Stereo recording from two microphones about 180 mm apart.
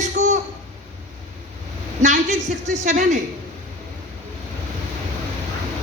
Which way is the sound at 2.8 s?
45° right (ahead or behind).